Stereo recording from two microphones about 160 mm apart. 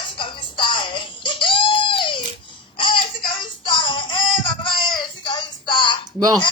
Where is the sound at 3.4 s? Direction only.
30° left (ahead or behind).